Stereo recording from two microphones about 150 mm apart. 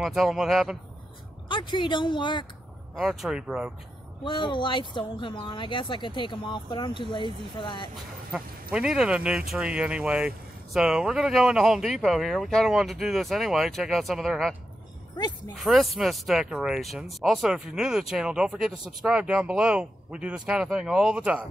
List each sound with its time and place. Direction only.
0.0 s speech: centre (ahead or behind)
1.5 s speech: 30° left (ahead or behind)
3.0 s speech: centre (ahead or behind)
4.2 s speech: 30° left (ahead or behind)
8.7 s speech: 5° right (ahead or behind)
15.1 s speech: 25° left (ahead or behind)
15.6 s speech: centre (ahead or behind)